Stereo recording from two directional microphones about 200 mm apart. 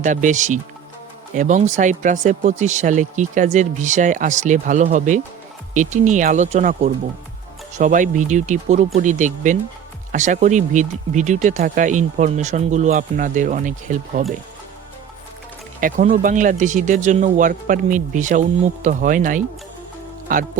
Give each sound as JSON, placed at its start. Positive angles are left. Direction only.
{"t": 0.0, "sound": "speech", "side_deg": -40}
{"t": 15.8, "sound": "speech", "side_deg": -40}